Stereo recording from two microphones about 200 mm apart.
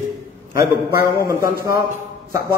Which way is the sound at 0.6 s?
15° right (ahead or behind).